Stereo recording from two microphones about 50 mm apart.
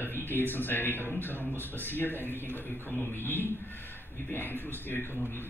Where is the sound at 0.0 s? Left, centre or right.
Left.